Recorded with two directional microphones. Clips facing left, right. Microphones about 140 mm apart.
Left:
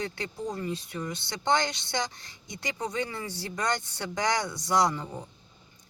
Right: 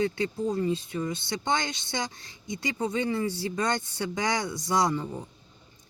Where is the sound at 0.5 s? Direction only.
25° right (ahead or behind).